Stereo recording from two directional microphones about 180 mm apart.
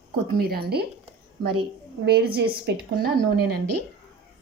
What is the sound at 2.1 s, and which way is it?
A woman's voice, 65° right (ahead or behind).